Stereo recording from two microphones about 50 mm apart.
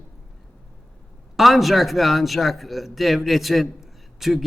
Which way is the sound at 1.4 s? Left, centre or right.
Centre.